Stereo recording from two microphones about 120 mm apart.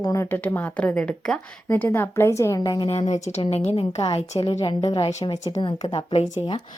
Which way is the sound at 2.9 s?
65° left (ahead or behind).